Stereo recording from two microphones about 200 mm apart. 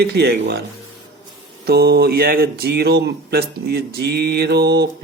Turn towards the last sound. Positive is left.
turn(degrees=-55)  # may be behind; listen again after turning